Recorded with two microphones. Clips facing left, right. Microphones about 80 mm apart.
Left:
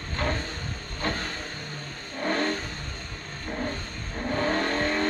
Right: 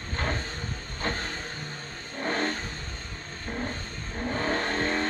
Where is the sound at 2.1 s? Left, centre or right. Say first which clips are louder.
Left 2 dB; left.